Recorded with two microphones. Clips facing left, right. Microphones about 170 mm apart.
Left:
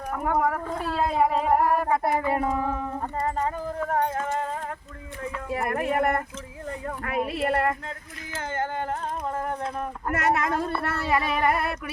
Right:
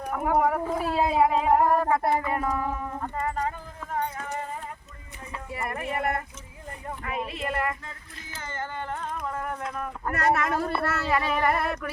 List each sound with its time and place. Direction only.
0.1 s speech: 5° right (ahead or behind)
2.2 s speech: 25° left (ahead or behind)
3.8 s clip-clop: 55° left (ahead or behind)
5.2 s speech: 80° left
7.4 s speech: 60° left (ahead or behind)
9.2 s speech: 30° left (ahead or behind); by 11.6 s 15° left (ahead or behind)